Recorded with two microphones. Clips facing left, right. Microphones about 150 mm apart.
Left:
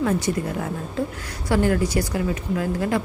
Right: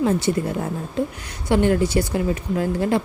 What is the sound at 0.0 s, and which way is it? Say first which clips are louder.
Speech: right 2 dB; 30° right (ahead or behind).